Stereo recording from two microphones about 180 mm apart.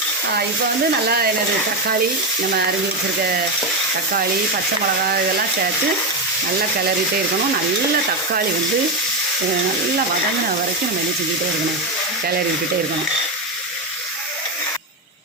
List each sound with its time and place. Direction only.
1.0 s speech: 60° right (ahead or behind)